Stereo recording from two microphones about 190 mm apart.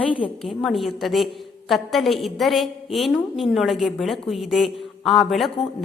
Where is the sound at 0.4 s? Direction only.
Centre (ahead or behind).